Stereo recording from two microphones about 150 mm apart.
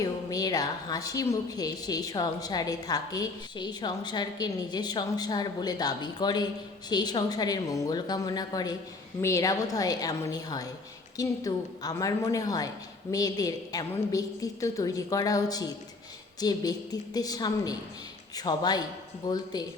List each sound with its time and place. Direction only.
0.0 s a woman's voice: 25° left (ahead or behind)